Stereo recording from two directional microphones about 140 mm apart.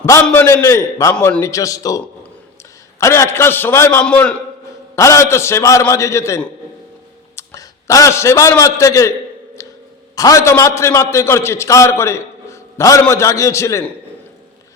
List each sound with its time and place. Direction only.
0.3 s a man's voice: 15° left (ahead or behind)
3.0 s a man's voice: 20° left (ahead or behind)
4.9 s a man's voice: 20° left (ahead or behind)
10.2 s a man's voice: 25° left (ahead or behind)